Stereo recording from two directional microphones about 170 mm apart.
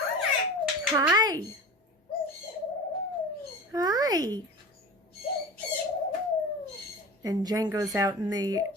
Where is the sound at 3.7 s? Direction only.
20° right (ahead or behind).